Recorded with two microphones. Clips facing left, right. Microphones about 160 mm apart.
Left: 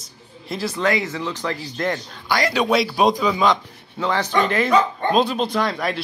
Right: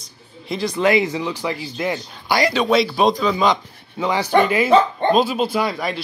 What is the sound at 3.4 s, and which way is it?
Speech, 5° right (ahead or behind).